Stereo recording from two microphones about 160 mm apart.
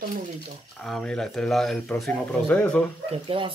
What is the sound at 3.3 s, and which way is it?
Speech, 35° right (ahead or behind).